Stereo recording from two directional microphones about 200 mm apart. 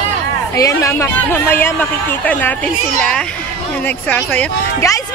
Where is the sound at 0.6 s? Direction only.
15° left (ahead or behind).